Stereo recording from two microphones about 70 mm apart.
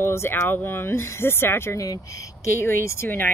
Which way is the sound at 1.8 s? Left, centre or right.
Left.